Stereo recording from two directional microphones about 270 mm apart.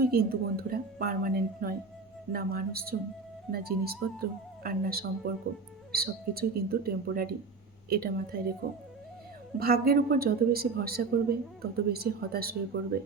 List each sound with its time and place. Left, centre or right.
0.0 s speech: right